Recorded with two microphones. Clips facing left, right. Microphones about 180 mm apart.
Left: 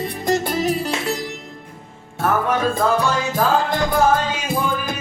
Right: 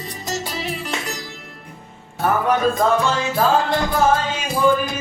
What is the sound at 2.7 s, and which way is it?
Music, 35° left (ahead or behind).